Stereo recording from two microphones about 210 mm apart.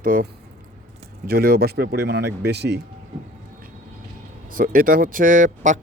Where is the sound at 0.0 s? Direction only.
45° right (ahead or behind).